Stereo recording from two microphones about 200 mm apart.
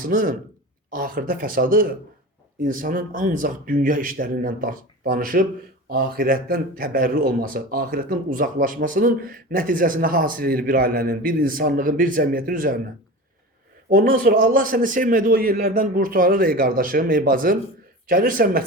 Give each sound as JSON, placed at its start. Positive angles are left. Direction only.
{"t": 0.0, "sound": "a man's voice", "side_deg": -45}
{"t": 13.9, "sound": "a man's voice", "side_deg": -45}